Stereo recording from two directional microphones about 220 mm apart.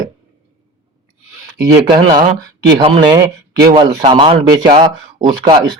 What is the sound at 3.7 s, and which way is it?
Speech, 25° right (ahead or behind).